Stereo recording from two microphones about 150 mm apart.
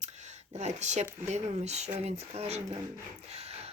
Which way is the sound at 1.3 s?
50° right (ahead or behind).